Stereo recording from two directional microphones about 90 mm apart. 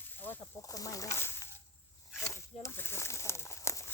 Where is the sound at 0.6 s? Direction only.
40° left (ahead or behind).